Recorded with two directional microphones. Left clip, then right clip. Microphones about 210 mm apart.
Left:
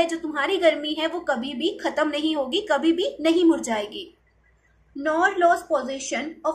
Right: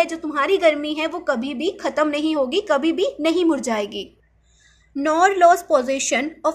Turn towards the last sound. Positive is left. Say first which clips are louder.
# right 7 dB
turn(degrees=-55)  # may be behind; listen again after turning